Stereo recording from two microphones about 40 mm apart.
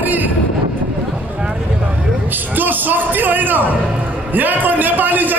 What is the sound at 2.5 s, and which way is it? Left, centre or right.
A man's voice, right.